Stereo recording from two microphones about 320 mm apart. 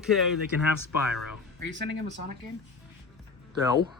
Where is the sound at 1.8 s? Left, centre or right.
Right.